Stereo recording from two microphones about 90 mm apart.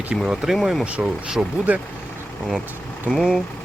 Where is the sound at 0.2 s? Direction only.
Centre (ahead or behind).